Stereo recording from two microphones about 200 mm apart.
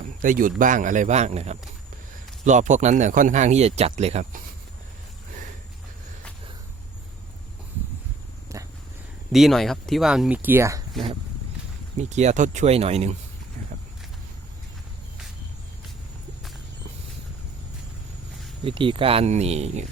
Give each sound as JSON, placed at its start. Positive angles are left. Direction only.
{"t": 0.0, "sound": "a sound", "side_deg": -45}
{"t": 0.6, "sound": "speech", "side_deg": -40}
{"t": 8.5, "sound": "purr", "side_deg": -15}
{"t": 9.3, "sound": "speech", "side_deg": 0}
{"t": 11.9, "sound": "speech", "side_deg": -35}
{"t": 18.6, "sound": "speech", "side_deg": -25}